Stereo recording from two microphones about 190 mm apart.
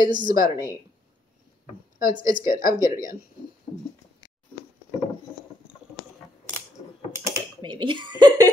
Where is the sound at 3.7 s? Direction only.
20° left (ahead or behind).